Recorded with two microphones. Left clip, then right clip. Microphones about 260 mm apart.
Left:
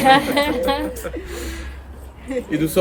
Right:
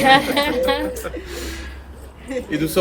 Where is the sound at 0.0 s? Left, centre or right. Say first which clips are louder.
Even; centre.